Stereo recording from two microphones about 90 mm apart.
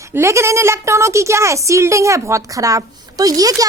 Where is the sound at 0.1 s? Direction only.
30° right (ahead or behind).